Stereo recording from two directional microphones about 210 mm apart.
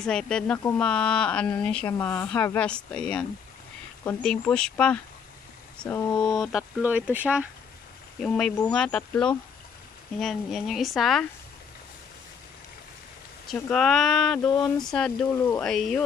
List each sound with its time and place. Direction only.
0.0 s speech: 5° left (ahead or behind); by 6.5 s 20° left (ahead or behind)
6.5 s speech: 5° right (ahead or behind)
8.2 s speech: 5° left (ahead or behind)
13.6 s speech: 5° left (ahead or behind)